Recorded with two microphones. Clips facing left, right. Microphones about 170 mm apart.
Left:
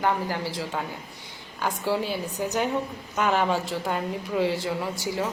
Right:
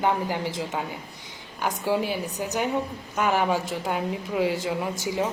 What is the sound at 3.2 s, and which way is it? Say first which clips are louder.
A woman's voice: even; 10° right (ahead or behind).